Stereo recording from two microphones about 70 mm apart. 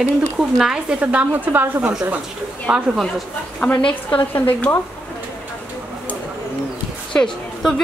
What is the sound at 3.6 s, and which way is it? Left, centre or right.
Speech, left.